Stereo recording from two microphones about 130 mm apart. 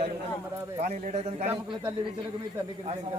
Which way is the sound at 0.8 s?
60° right (ahead or behind).